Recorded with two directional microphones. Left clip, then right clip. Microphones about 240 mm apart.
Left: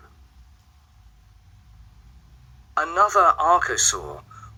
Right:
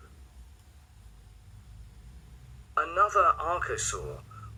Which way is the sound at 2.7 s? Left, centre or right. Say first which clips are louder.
Left 6 dB; left.